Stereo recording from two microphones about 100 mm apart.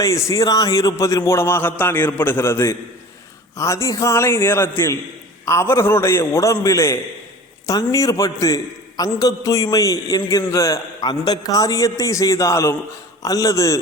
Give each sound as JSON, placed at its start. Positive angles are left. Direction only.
{"t": 0.0, "sound": "a man's voice", "side_deg": 30}